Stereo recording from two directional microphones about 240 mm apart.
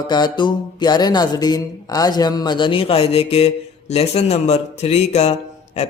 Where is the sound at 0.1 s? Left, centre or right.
Centre.